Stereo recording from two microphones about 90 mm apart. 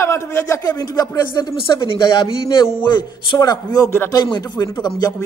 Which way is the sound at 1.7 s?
65° left (ahead or behind).